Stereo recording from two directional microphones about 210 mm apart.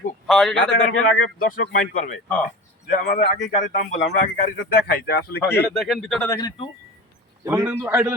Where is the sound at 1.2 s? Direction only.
40° left (ahead or behind).